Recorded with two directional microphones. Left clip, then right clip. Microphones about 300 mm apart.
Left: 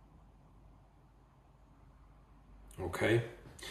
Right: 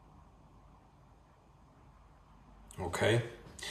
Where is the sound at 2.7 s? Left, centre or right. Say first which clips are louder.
Right 1 dB; centre.